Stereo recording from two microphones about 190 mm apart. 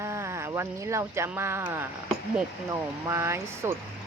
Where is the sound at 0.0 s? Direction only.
15° right (ahead or behind).